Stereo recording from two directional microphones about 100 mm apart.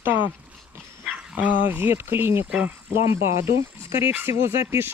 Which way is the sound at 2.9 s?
25° right (ahead or behind).